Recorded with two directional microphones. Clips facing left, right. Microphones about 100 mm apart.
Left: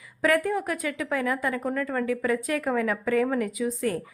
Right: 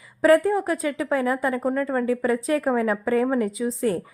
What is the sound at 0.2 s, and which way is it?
A woman's voice, 30° right (ahead or behind).